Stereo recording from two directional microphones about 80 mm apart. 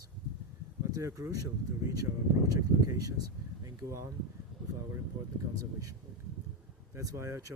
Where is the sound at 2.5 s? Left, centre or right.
Right.